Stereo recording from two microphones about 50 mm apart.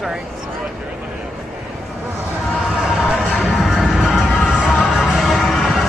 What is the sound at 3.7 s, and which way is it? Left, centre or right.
Music, centre.